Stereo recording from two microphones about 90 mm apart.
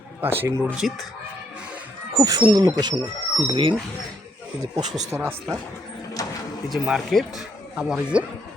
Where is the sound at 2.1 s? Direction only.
40° right (ahead or behind).